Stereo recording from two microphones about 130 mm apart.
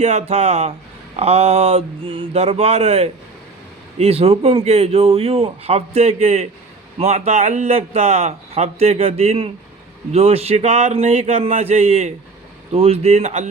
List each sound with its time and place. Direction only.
0.0 s a man's voice: 60° right (ahead or behind)